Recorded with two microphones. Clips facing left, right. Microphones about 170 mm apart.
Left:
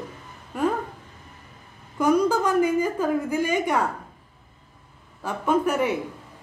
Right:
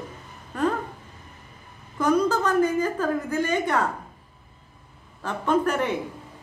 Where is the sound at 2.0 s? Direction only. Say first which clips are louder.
Left 1 dB; 10° left (ahead or behind).